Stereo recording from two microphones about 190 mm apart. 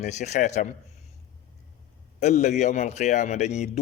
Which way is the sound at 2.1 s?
40° left (ahead or behind).